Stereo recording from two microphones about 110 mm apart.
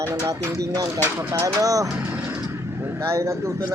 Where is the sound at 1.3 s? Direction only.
30° right (ahead or behind).